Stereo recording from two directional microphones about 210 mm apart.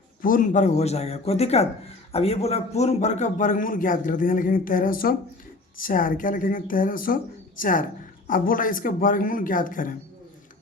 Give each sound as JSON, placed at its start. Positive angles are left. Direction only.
{"t": 0.2, "sound": "a man's voice", "side_deg": 40}